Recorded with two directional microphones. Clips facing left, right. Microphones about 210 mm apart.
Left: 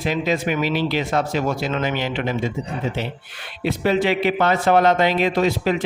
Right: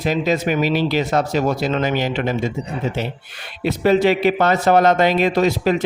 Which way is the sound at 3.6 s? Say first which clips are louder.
Right 4 dB; 40° right (ahead or behind).